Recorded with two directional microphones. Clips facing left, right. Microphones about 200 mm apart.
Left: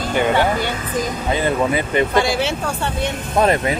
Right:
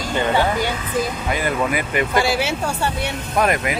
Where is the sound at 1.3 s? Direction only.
25° left (ahead or behind).